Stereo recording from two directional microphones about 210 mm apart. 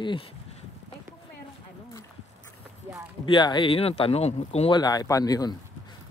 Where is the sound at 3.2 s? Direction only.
20° left (ahead or behind).